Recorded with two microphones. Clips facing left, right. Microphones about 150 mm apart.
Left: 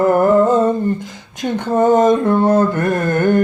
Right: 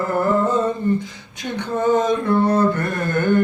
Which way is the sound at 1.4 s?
50° left (ahead or behind).